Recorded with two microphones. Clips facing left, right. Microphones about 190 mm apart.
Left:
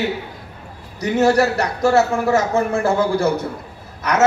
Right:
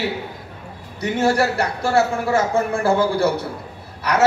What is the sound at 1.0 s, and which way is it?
A man's voice, 30° right (ahead or behind).